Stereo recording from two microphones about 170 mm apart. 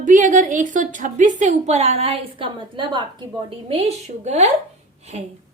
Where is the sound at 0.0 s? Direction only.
50° right (ahead or behind).